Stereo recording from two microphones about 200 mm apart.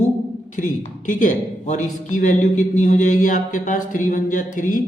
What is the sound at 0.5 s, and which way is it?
A man's voice, 40° left (ahead or behind).